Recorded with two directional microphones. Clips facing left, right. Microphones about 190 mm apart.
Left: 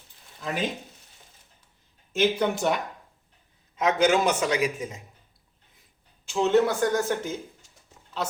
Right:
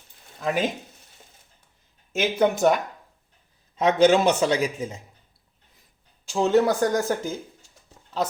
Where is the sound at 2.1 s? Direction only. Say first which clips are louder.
Right 2 dB; 45° right (ahead or behind).